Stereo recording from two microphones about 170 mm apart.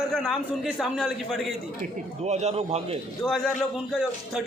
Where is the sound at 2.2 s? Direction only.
40° right (ahead or behind).